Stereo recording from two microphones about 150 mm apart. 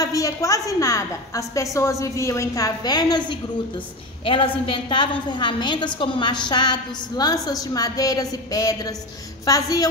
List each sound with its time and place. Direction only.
0.0 s a woman's voice: 20° left (ahead or behind)